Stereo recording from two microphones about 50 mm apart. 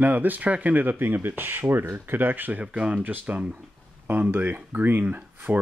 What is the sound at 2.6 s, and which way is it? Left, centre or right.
Speech, right.